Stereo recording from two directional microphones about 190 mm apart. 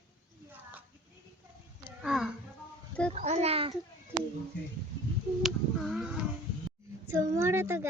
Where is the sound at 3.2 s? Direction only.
35° right (ahead or behind).